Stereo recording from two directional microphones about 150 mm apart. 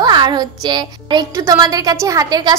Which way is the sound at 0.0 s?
30° right (ahead or behind).